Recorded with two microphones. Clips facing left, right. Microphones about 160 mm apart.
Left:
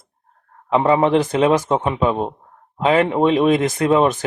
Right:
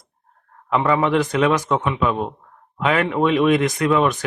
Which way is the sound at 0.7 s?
30° left (ahead or behind).